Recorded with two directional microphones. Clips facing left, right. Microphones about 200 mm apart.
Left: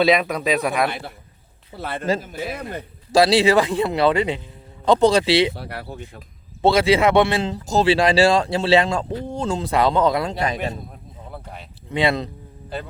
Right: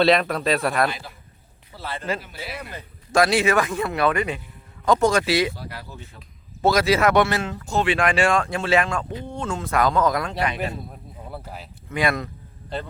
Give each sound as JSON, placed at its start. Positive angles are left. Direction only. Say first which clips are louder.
{"t": 0.0, "sound": "speech", "louder": "left 1 dB", "side_deg": 0}
{"t": 0.9, "sound": "speech", "louder": "left 2 dB", "side_deg": 60}
{"t": 2.0, "sound": "speech", "louder": "left 7 dB", "side_deg": 40}
{"t": 3.1, "sound": "speech", "louder": "left 4 dB", "side_deg": 30}
{"t": 5.5, "sound": "speech", "louder": "left 5 dB", "side_deg": 65}
{"t": 6.6, "sound": "speech", "louder": "left 3 dB", "side_deg": 30}
{"t": 10.4, "sound": "speech", "louder": "left 2 dB", "side_deg": 40}
{"t": 11.3, "sound": "speech", "louder": "right 1 dB", "side_deg": -5}
{"t": 11.9, "sound": "speech", "louder": "left 3 dB", "side_deg": 30}